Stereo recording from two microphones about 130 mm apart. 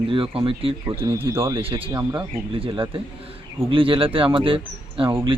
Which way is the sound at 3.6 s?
40° right (ahead or behind).